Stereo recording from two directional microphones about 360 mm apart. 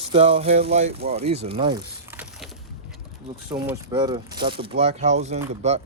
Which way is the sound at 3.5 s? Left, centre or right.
Centre.